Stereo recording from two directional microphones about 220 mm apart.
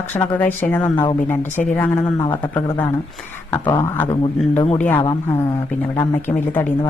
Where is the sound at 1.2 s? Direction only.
10° left (ahead or behind).